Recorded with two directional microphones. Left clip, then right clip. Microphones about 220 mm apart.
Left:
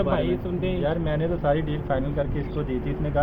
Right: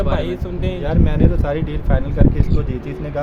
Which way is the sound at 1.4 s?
30° right (ahead or behind).